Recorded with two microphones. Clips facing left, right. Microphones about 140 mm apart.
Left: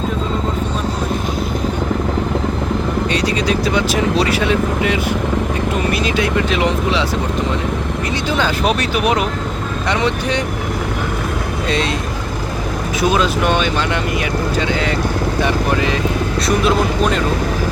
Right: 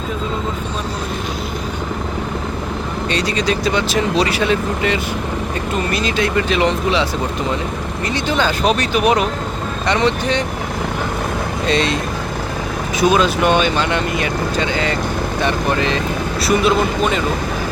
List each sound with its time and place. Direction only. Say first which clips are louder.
3.1 s speech: right 2 dB; 5° left (ahead or behind)
8.4 s speech: right 1 dB; 5° left (ahead or behind)
13.0 s speech: right 2 dB; centre (ahead or behind)